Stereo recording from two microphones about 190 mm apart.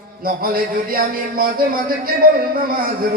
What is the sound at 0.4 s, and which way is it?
A man's voice, 50° right (ahead or behind).